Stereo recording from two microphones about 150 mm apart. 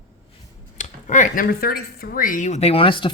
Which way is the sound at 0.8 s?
60° left (ahead or behind).